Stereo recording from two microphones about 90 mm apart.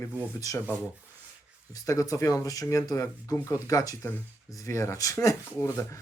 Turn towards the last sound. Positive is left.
turn(degrees=35)  # may be behind; listen again after turning